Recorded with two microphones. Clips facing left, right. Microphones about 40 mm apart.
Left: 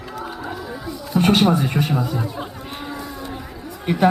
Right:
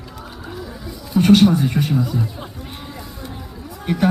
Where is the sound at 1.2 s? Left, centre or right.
Centre.